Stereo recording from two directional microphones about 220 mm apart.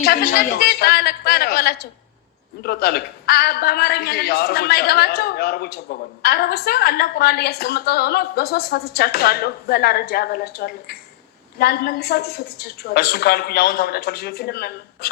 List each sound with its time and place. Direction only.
0.0 s a woman's voice: 45° left (ahead or behind)